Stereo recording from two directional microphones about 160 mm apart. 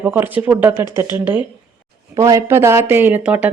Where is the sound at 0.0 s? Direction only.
10° right (ahead or behind).